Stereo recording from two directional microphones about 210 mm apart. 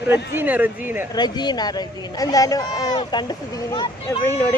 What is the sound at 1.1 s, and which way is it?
Speech, 20° left (ahead or behind).